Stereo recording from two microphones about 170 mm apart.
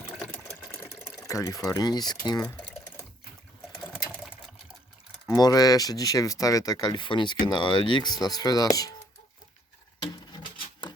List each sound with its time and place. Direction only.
0.2 s sewing machine: 10° left (ahead or behind)
2.6 s typing: 20° left (ahead or behind)
5.4 s speech: 20° left (ahead or behind)
10.3 s a sound: 25° left (ahead or behind)